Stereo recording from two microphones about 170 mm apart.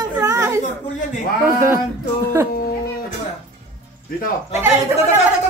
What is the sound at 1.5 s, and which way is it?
Speech, 15° right (ahead or behind).